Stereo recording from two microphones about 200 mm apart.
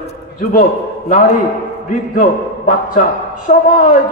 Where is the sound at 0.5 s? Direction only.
40° left (ahead or behind).